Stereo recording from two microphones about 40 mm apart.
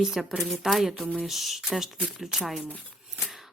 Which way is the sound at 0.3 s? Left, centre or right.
Centre.